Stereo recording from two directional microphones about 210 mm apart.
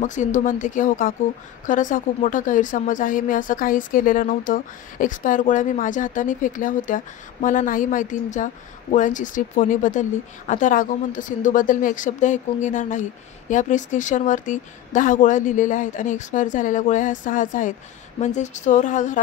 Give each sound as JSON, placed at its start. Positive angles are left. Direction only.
{"t": 0.0, "sound": "a woman's voice", "side_deg": 35}